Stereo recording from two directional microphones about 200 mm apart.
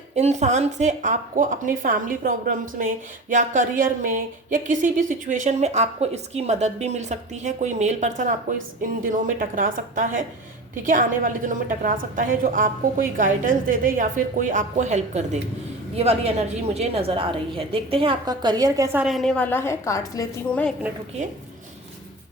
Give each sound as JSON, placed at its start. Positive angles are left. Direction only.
{"t": 0.2, "sound": "a woman's voice", "side_deg": -35}